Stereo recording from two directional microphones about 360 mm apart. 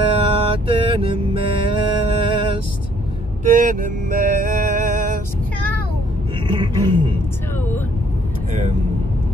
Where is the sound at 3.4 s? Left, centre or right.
Right.